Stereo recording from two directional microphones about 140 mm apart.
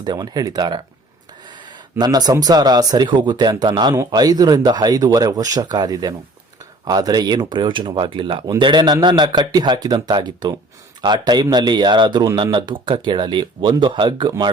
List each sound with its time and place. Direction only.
0.0 s speech: 30° right (ahead or behind)